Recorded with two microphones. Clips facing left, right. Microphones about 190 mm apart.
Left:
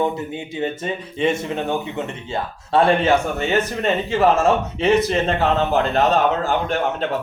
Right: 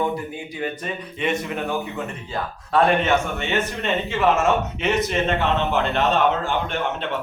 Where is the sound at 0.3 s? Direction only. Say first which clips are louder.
Left 4 dB; 25° left (ahead or behind).